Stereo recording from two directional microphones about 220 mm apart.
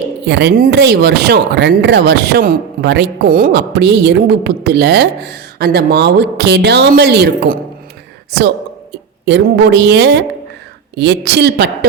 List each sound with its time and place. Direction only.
0.3 s speech: 50° right (ahead or behind)
8.9 s speech: 50° right (ahead or behind)